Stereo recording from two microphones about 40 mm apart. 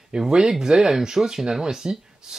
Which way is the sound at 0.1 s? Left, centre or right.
Centre.